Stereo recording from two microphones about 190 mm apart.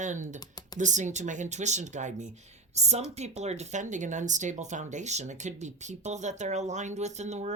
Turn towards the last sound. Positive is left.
turn(degrees=-35)  # may be behind; listen again after turning